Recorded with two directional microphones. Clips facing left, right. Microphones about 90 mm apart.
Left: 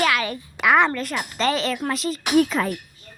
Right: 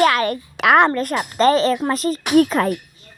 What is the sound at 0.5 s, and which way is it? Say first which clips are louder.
Speech: right 4 dB; 70° right (ahead or behind).